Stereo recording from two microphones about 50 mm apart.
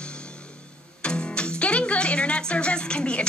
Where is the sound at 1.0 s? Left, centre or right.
Centre.